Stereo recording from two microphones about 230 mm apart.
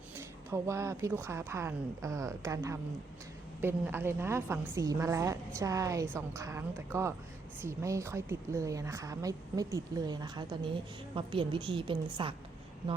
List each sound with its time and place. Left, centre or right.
0.2 s a woman's voice: centre